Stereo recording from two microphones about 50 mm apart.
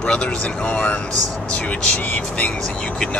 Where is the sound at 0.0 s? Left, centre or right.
Left.